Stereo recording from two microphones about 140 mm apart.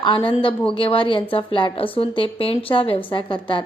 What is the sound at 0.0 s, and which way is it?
A woman's voice, 35° left (ahead or behind).